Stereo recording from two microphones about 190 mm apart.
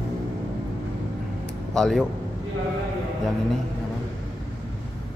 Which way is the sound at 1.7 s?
Centre (ahead or behind).